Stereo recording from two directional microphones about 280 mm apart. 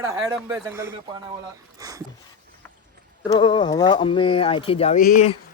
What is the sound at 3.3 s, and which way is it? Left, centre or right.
Speech, centre.